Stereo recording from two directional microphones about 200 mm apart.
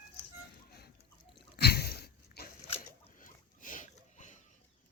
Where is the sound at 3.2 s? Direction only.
40° left (ahead or behind).